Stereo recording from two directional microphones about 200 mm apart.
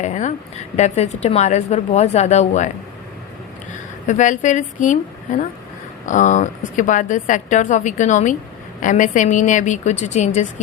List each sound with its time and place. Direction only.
0.0 s a sound: 35° left (ahead or behind)
0.8 s a woman's voice: 35° left (ahead or behind)
4.0 s a woman's voice: 35° left (ahead or behind)